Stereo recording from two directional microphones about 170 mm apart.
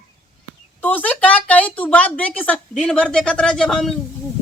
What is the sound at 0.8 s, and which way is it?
A woman's voice, 10° left (ahead or behind).